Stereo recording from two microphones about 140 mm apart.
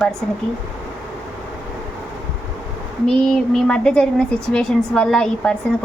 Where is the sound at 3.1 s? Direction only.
5° left (ahead or behind).